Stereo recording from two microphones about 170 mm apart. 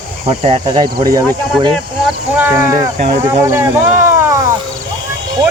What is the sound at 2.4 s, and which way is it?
Speech, 10° right (ahead or behind).